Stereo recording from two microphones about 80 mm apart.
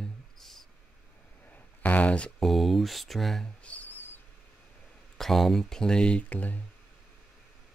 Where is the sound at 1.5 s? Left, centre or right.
Centre.